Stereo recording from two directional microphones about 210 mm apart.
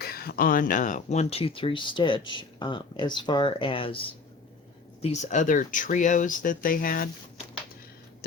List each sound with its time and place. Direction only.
0.0 s speech: 45° left (ahead or behind); by 4.0 s 25° left (ahead or behind)
5.0 s speech: 35° left (ahead or behind)